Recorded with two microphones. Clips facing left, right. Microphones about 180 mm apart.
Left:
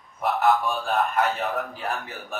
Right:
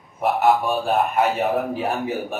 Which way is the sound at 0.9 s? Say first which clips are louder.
Right 3 dB; 5° right (ahead or behind).